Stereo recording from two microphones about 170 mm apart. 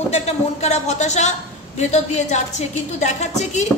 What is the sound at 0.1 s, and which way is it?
A woman's voice, 40° left (ahead or behind).